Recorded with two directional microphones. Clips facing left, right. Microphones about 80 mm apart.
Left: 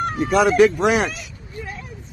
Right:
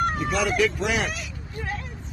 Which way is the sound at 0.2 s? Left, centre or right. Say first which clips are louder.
Left 8 dB; left.